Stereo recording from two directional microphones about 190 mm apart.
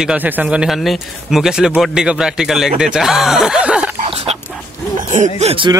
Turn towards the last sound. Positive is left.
turn(degrees=-30)  # may be behind; listen again after turning